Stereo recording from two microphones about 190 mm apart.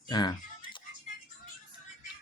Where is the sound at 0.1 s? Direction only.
25° left (ahead or behind).